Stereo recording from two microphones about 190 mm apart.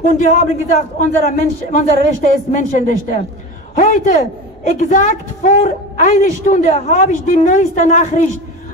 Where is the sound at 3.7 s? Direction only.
40° left (ahead or behind).